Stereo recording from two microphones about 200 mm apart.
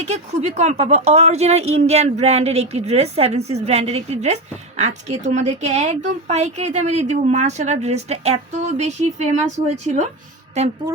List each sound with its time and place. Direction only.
0.1 s speech: 35° right (ahead or behind)